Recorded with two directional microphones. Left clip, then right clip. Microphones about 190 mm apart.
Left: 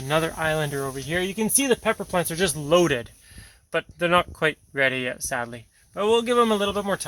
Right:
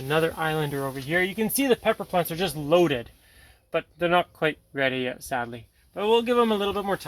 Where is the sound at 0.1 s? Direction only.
50° left (ahead or behind).